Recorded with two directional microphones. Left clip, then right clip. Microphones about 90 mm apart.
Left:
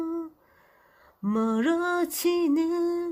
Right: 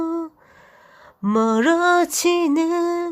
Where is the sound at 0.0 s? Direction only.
55° right (ahead or behind).